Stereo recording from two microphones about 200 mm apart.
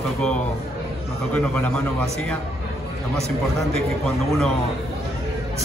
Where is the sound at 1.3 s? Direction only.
5° left (ahead or behind).